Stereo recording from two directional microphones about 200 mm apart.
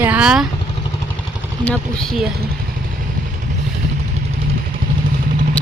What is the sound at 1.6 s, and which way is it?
Speech, 5° left (ahead or behind).